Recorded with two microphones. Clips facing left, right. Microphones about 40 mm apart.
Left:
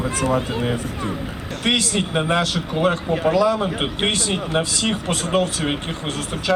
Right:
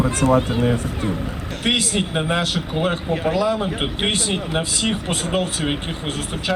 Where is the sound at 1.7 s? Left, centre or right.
Right.